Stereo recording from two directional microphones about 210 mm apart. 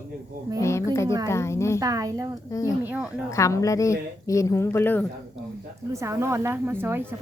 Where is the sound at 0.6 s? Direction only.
15° left (ahead or behind).